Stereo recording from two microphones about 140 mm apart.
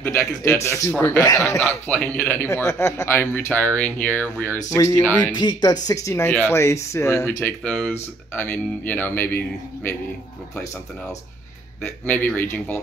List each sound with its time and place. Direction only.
0.0 s a man's voice: 20° left (ahead or behind)
4.6 s speech: 25° left (ahead or behind)
5.0 s a man's voice: 10° left (ahead or behind)
5.3 s speech: 30° left (ahead or behind)
7.6 s a man's voice: 5° left (ahead or behind)
11.8 s a man's voice: 10° left (ahead or behind)